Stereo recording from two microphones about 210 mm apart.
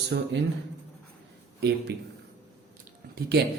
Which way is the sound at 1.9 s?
50° right (ahead or behind).